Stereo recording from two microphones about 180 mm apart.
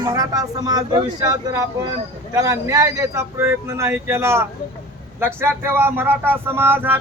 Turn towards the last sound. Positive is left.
turn(degrees=-10)  # may be behind; listen again after turning